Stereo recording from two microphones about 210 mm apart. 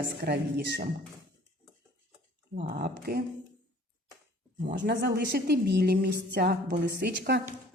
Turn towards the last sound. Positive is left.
turn(degrees=-55)  # may be behind; listen again after turning